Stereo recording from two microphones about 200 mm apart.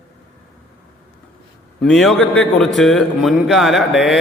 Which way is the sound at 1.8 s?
Centre (ahead or behind).